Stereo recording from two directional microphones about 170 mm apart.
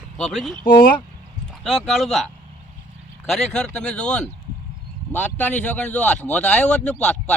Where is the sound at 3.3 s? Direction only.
Centre (ahead or behind).